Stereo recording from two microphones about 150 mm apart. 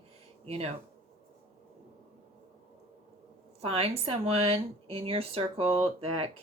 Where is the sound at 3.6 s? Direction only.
40° right (ahead or behind).